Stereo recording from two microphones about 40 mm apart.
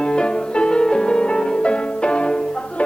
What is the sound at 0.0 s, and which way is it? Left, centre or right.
Music, left.